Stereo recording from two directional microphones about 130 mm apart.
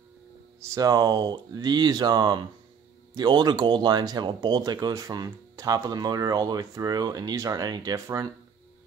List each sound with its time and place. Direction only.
0.7 s speech: 30° right (ahead or behind)